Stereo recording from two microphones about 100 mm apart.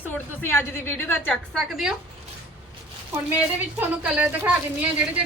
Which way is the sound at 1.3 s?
Centre (ahead or behind).